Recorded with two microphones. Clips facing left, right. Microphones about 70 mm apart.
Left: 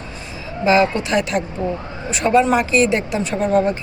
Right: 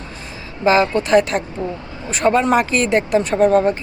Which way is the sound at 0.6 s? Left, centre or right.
Right.